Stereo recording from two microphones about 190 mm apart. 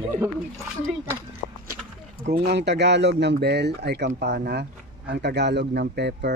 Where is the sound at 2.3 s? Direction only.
60° right (ahead or behind).